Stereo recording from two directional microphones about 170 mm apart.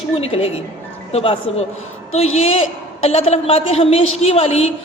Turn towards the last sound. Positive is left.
turn(degrees=35)  # may be behind; listen again after turning